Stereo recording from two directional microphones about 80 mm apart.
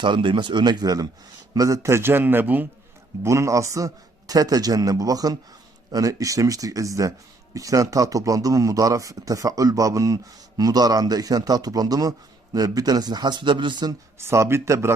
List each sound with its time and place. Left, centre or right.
0.0 s speech: right
1.5 s a man's voice: right
3.2 s a man's voice: right
14.2 s speech: right